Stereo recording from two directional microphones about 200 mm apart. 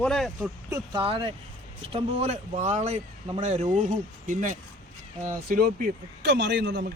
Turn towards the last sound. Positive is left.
turn(degrees=-60)  # may be behind; listen again after turning